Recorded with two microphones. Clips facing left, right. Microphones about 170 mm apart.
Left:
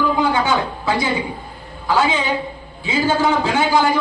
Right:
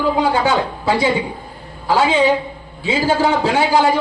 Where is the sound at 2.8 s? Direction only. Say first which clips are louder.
Right 1 dB; 30° right (ahead or behind).